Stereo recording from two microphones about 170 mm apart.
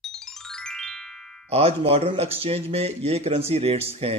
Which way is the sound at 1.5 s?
35° right (ahead or behind).